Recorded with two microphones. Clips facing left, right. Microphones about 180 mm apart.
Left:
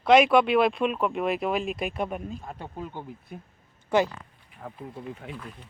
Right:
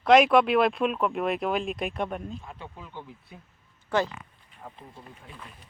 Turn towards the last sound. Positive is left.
turn(degrees=75)  # may be behind; listen again after turning